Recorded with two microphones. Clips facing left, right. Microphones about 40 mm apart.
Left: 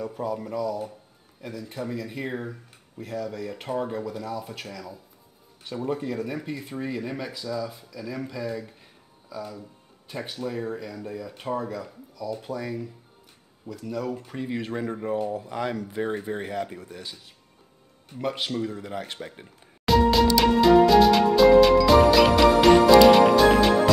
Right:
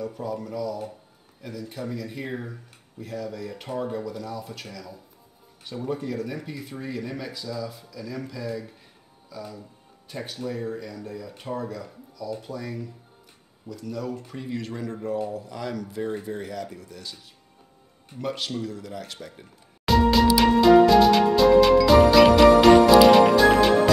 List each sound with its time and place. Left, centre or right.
0.0 s speech: centre; by 17.1 s left
18.2 s speech: centre
19.8 s music: centre